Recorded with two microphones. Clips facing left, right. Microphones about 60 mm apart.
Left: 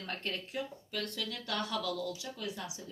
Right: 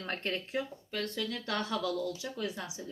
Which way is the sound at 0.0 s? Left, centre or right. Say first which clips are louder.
Right 3 dB; right.